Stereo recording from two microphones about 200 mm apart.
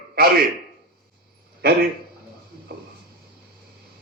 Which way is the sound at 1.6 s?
50° right (ahead or behind).